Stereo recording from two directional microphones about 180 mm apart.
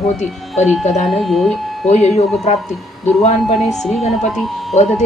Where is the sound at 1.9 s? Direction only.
40° left (ahead or behind).